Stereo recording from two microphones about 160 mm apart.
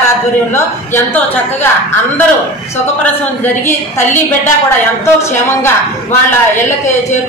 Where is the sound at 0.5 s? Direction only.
15° left (ahead or behind).